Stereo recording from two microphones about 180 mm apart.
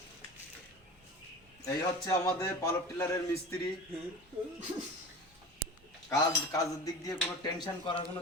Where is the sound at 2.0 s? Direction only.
20° left (ahead or behind).